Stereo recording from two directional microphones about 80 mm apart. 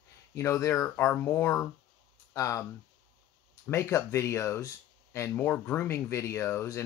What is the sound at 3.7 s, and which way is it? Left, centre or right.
Speech, left.